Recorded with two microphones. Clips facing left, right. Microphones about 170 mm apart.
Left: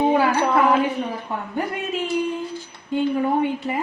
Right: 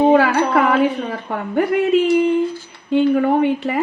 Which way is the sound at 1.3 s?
70° right (ahead or behind).